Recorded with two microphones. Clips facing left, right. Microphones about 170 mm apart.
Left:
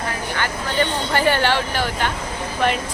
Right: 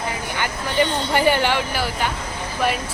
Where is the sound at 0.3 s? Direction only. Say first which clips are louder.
Right 1 dB; 15° right (ahead or behind).